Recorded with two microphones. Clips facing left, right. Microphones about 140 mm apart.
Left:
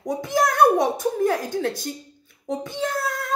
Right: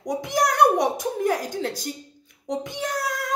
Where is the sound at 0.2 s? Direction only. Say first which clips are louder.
Left 1 dB; 20° right (ahead or behind).